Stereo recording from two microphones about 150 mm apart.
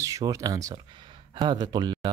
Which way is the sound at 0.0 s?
20° right (ahead or behind).